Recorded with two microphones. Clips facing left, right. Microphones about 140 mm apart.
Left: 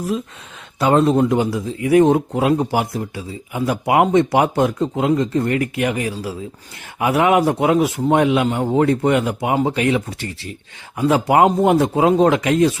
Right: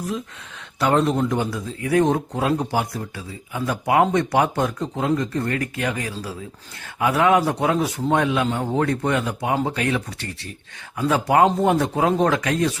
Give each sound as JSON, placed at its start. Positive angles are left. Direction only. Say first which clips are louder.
{"t": 0.8, "sound": "speech", "louder": "left 5 dB", "side_deg": 25}